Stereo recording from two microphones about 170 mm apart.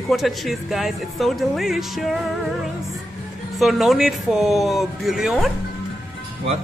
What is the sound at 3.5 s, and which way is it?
Speech, centre (ahead or behind).